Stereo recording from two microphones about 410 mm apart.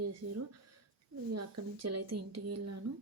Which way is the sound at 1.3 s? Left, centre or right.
Right.